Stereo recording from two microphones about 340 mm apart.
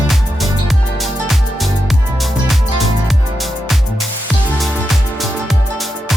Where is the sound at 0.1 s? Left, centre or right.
Centre.